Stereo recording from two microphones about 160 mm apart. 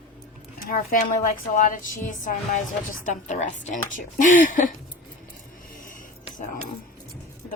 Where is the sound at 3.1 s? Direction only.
50° left (ahead or behind).